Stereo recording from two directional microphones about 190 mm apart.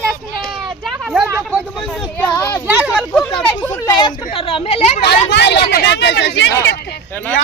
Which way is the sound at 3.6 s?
15° left (ahead or behind).